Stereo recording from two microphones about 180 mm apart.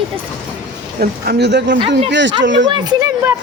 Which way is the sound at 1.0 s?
60° right (ahead or behind).